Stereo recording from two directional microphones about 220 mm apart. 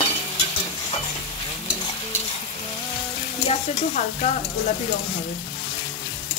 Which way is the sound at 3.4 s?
30° left (ahead or behind).